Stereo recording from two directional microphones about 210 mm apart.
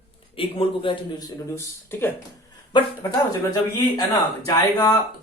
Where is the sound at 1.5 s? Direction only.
10° left (ahead or behind).